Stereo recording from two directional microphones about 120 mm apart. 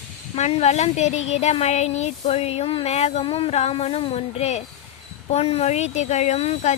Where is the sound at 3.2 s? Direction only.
50° left (ahead or behind); by 6.7 s 65° left (ahead or behind).